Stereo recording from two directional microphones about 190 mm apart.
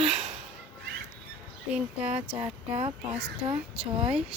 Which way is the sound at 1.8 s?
5° right (ahead or behind).